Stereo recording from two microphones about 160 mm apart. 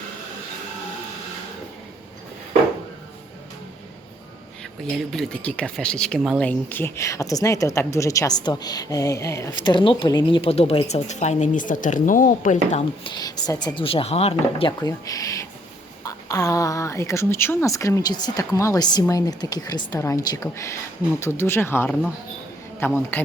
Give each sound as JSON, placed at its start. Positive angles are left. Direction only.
{"t": 5.1, "sound": "speech", "side_deg": 5}
{"t": 9.6, "sound": "a woman's voice", "side_deg": 30}
{"t": 13.1, "sound": "a woman's voice", "side_deg": 25}